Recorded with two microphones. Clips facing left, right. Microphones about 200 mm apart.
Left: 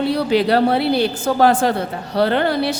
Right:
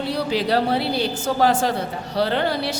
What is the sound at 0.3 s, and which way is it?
A woman's voice, 60° left (ahead or behind).